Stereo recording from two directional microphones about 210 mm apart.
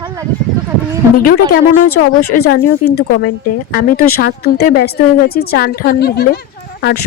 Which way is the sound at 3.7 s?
45° left (ahead or behind).